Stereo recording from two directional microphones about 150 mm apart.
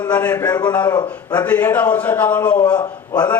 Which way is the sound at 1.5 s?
10° left (ahead or behind).